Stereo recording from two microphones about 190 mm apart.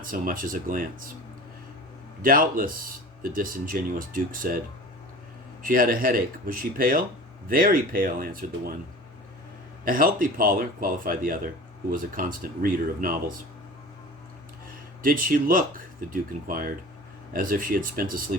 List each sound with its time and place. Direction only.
0.0 s speech: 45° right (ahead or behind)
2.2 s speech: 50° right (ahead or behind)
5.6 s speech: 45° right (ahead or behind)
9.8 s speech: 50° right (ahead or behind)
15.0 s speech: 45° right (ahead or behind)